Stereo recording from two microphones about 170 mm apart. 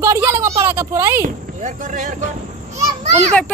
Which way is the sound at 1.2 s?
45° right (ahead or behind).